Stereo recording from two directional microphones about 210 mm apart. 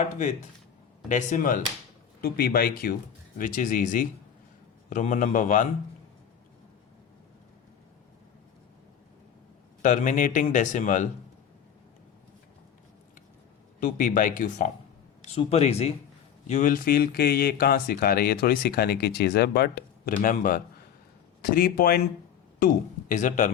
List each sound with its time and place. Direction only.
1.0 s speech: 40° left (ahead or behind)
9.8 s speech: 35° left (ahead or behind)
13.7 s speech: 40° left (ahead or behind)